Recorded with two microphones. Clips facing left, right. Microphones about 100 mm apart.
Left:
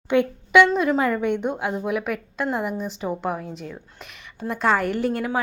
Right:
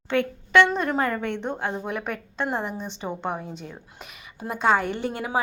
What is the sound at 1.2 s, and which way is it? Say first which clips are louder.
A woman's voice: left 5 dB; 15° left (ahead or behind).